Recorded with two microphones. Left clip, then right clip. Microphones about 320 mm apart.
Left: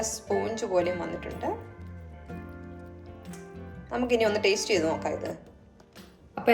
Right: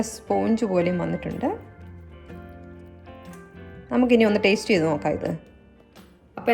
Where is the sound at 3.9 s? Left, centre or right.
Right.